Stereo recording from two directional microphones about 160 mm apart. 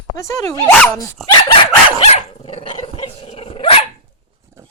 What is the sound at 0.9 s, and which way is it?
Dog, 30° left (ahead or behind).